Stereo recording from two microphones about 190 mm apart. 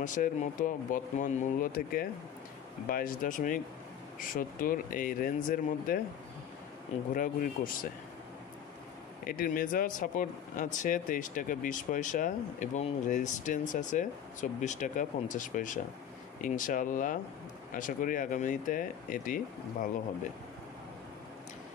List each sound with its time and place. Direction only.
0.0 s speech: 40° left (ahead or behind)
7.2 s speech: 45° left (ahead or behind)
9.2 s speech: 50° left (ahead or behind)